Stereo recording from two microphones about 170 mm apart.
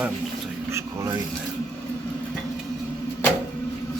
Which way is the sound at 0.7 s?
15° right (ahead or behind).